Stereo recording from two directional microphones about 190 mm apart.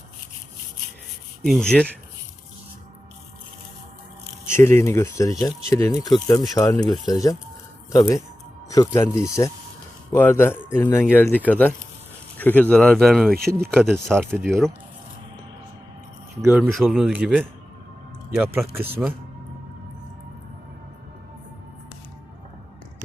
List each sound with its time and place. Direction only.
1.4 s speech: centre (ahead or behind)
4.4 s speech: 15° left (ahead or behind)
6.7 s speech: 5° left (ahead or behind)
7.0 s speech: 20° left (ahead or behind); by 13.3 s centre (ahead or behind)
13.3 s speech: 55° right (ahead or behind)
13.7 s speech: 5° left (ahead or behind)
16.4 s speech: centre (ahead or behind)